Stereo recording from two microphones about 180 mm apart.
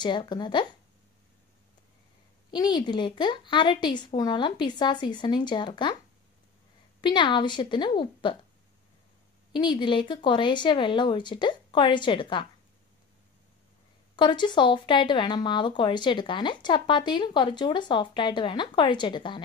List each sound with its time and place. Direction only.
0.0 s speech: 25° left (ahead or behind)
2.5 s speech: 25° left (ahead or behind)
7.0 s speech: 25° left (ahead or behind)
9.5 s speech: 25° left (ahead or behind)
14.1 s speech: 25° left (ahead or behind)